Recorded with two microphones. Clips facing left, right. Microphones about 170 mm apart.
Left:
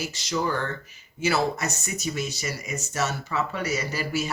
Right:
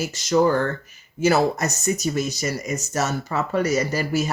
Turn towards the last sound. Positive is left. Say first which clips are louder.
# right 6 dB
turn(degrees=-40)  # may be behind; listen again after turning